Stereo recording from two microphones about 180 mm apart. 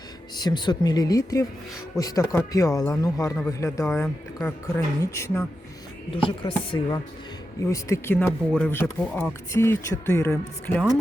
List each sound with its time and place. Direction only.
0.3 s speech: 25° left (ahead or behind)
6.1 s speech: 30° left (ahead or behind)
7.7 s speech: 15° left (ahead or behind)
10.3 s speech: 5° left (ahead or behind)